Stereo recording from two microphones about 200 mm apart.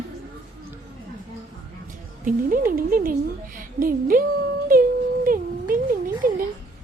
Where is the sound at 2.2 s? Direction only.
45° right (ahead or behind).